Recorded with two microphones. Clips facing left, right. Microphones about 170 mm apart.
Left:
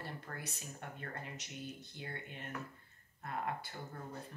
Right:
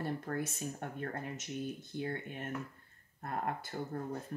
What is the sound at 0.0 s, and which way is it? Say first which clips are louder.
Speech: right 10 dB; 50° right (ahead or behind).